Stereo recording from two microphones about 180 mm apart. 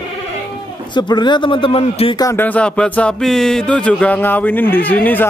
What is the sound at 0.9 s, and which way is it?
Speech, 25° left (ahead or behind).